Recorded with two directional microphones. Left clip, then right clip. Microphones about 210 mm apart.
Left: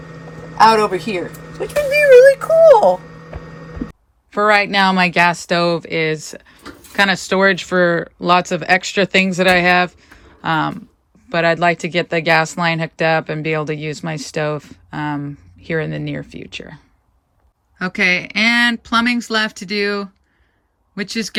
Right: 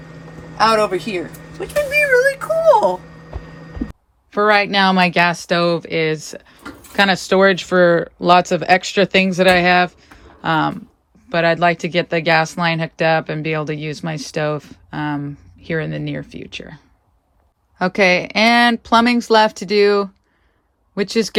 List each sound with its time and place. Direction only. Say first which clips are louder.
0.5 s speech: left 3 dB; 5° left (ahead or behind)
4.3 s speech: left 1 dB; 10° right (ahead or behind)
17.7 s speech: right 2 dB; 25° right (ahead or behind)